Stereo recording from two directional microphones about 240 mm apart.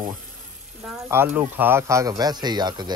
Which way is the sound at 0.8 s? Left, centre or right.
Centre.